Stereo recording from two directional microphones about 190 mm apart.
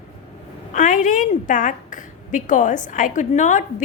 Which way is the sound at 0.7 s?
40° left (ahead or behind).